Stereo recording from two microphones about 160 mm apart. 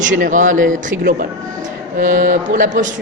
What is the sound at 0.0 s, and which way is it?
Speech, 55° right (ahead or behind).